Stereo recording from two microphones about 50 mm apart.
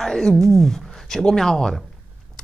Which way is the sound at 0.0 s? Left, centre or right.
Centre.